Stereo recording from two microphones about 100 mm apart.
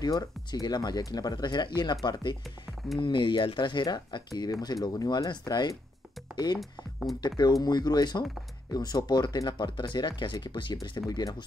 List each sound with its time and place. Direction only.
0.0 s speech: 45° left (ahead or behind)
6.6 s speech: centre (ahead or behind)
7.2 s speech: 45° left (ahead or behind)